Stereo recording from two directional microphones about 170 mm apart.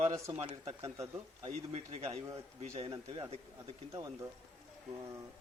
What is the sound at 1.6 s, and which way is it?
Speech, 40° right (ahead or behind).